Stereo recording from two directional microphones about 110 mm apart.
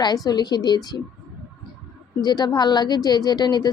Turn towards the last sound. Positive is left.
turn(degrees=40)  # may be behind; listen again after turning